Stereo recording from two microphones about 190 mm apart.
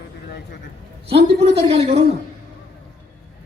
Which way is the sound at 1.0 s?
30° right (ahead or behind).